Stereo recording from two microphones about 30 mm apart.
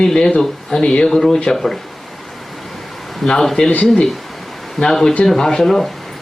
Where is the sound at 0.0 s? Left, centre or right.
Centre.